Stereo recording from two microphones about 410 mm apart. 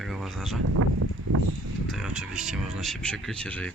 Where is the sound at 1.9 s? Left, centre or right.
Centre.